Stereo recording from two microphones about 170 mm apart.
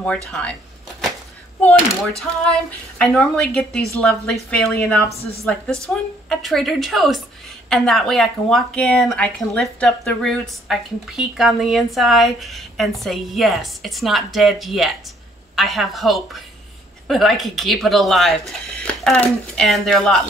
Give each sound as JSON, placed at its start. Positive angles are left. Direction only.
{"t": 0.3, "sound": "a woman's voice", "side_deg": 5}
{"t": 1.6, "sound": "a woman's voice", "side_deg": 5}
{"t": 5.1, "sound": "a woman's voice", "side_deg": 35}
{"t": 5.4, "sound": "a woman's voice", "side_deg": 0}